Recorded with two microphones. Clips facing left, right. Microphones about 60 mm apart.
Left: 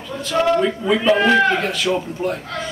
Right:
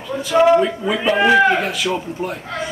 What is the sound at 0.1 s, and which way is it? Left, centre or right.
A man's voice, centre.